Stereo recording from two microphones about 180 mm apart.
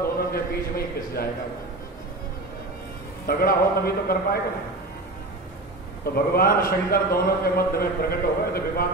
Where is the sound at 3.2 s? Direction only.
55° left (ahead or behind).